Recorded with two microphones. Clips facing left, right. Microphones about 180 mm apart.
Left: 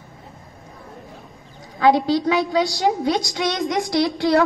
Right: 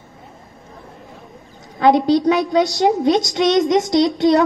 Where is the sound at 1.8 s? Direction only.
20° right (ahead or behind).